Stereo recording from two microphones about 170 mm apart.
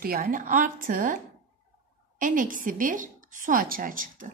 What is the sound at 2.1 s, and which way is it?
A woman's voice, 50° right (ahead or behind).